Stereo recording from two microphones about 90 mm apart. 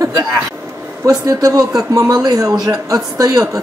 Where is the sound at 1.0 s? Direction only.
45° right (ahead or behind).